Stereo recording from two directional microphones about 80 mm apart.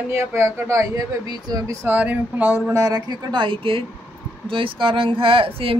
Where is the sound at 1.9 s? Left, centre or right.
Right.